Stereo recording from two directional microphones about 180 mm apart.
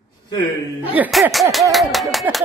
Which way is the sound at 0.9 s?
5° right (ahead or behind).